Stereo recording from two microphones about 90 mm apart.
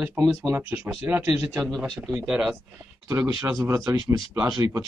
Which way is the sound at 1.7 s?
Centre (ahead or behind).